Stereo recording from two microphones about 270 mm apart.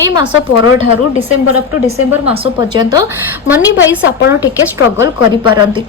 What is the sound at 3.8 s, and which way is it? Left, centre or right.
Speech, left.